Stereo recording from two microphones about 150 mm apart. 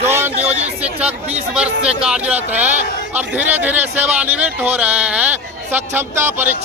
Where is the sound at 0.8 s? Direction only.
10° right (ahead or behind).